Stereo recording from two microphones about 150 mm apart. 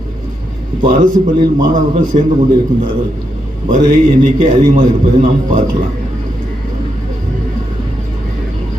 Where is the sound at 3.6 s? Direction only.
60° right (ahead or behind).